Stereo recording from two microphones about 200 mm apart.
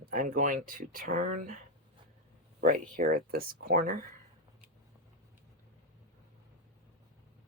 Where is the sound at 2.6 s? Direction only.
45° right (ahead or behind).